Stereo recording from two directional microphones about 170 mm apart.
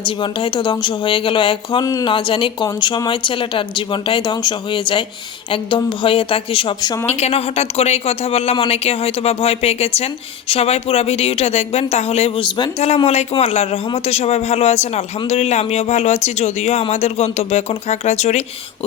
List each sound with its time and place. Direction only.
0.0 s a man's voice: 30° left (ahead or behind)